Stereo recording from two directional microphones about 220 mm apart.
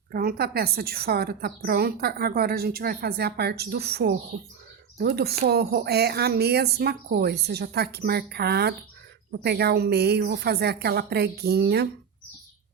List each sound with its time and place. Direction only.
0.1 s a woman's voice: 45° right (ahead or behind)